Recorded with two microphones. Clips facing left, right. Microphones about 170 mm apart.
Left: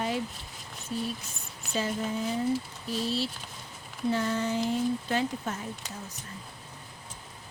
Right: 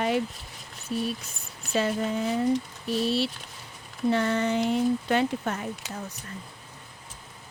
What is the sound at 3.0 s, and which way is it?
Speech, 65° right (ahead or behind).